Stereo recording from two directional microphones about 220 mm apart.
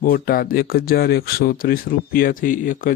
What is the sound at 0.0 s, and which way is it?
Speech, 40° left (ahead or behind).